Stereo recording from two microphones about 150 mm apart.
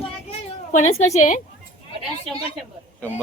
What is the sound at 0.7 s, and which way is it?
Speech, 50° left (ahead or behind).